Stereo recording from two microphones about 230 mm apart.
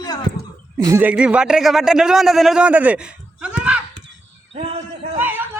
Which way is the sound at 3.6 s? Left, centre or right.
Centre.